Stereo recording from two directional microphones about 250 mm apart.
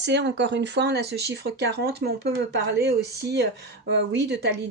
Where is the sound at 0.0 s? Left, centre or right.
Right.